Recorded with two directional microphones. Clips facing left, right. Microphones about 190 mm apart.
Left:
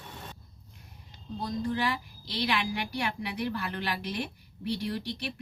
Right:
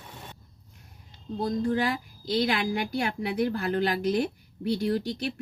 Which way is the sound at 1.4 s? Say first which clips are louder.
Right 4 dB; 45° right (ahead or behind).